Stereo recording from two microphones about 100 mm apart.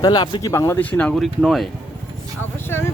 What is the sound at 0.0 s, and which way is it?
Speech, 45° left (ahead or behind).